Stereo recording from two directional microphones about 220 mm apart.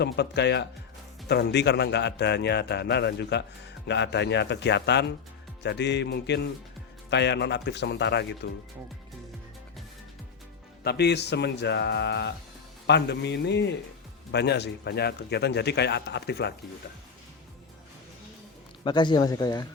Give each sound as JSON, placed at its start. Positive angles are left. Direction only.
{"t": 0.0, "sound": "speech", "side_deg": 50}
{"t": 10.8, "sound": "speech", "side_deg": 50}
{"t": 18.9, "sound": "a man's voice", "side_deg": 20}